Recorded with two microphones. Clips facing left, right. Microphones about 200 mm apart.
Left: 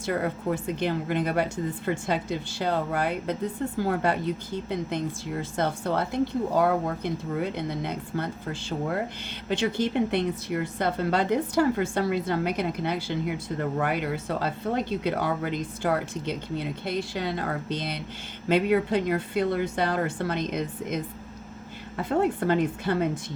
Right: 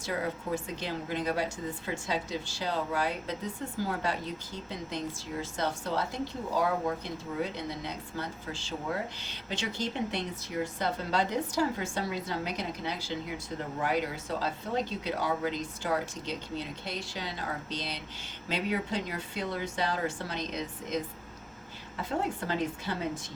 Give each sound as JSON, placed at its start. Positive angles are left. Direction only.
{"t": 0.0, "sound": "speech", "side_deg": 55}